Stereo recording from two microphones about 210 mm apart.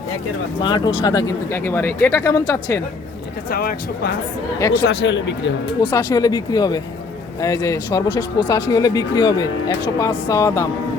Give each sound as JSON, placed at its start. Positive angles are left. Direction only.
{"t": 0.6, "sound": "speech", "side_deg": 20}
{"t": 3.5, "sound": "speech", "side_deg": 45}
{"t": 5.9, "sound": "speech", "side_deg": 10}